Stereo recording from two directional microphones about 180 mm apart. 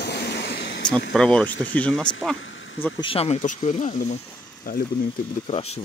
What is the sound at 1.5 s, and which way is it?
Speech, 90° left.